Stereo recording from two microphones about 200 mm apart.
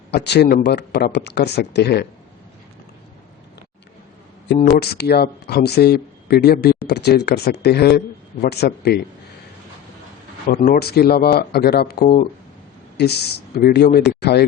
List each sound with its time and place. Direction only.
0.1 s speech: 55° left (ahead or behind)
4.5 s speech: 35° left (ahead or behind)
4.8 s speech: 55° left (ahead or behind)
10.5 s speech: 45° left (ahead or behind)